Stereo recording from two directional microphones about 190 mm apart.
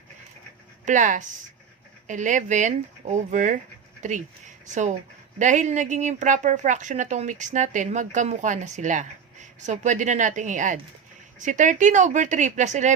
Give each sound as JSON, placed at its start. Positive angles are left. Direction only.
{"t": 0.9, "sound": "a woman's voice", "side_deg": -40}